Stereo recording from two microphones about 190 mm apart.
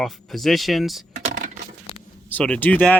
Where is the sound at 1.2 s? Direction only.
40° right (ahead or behind).